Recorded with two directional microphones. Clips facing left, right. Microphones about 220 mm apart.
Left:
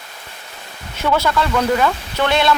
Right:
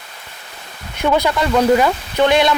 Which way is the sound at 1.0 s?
15° right (ahead or behind).